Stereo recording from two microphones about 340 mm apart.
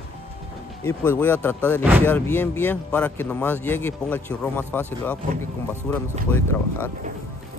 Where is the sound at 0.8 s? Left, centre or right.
Centre.